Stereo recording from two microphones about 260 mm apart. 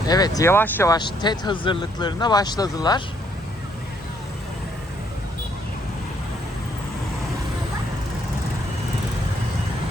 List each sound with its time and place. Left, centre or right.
0.1 s speech: centre